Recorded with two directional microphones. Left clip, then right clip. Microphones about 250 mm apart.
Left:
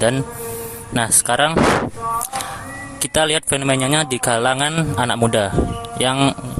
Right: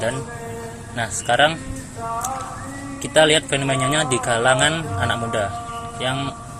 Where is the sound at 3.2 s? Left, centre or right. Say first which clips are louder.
Right 2 dB; left.